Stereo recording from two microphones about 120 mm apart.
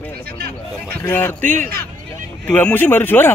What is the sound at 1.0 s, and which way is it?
Speech, 15° left (ahead or behind).